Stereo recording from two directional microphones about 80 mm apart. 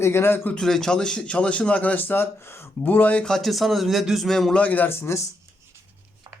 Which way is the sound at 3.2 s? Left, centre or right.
Centre.